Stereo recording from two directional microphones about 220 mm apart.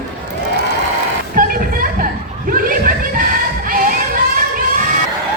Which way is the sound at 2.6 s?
40° right (ahead or behind).